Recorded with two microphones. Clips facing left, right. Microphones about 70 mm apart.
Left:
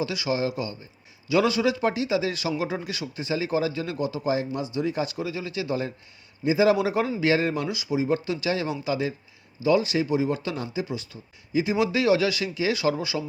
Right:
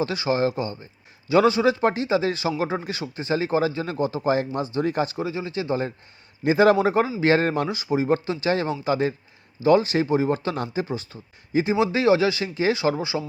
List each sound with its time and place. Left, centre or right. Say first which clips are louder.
0.0 s speech: right 4 dB; right
6.4 s speech: right 3 dB; right
6.7 s speech: right 4 dB; right